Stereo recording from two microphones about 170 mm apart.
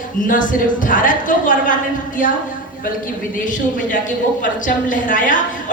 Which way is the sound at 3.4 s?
50° left (ahead or behind).